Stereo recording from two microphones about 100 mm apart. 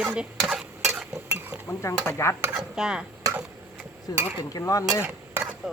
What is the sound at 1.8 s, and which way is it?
Speech, 30° left (ahead or behind).